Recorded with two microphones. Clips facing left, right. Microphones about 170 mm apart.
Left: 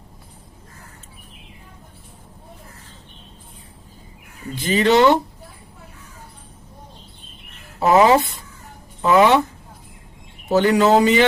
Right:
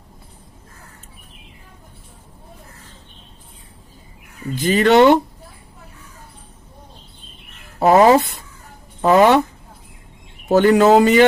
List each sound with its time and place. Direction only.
4.6 s speech: 55° right (ahead or behind)
7.8 s speech: 55° right (ahead or behind)
10.5 s a man's voice: 50° right (ahead or behind)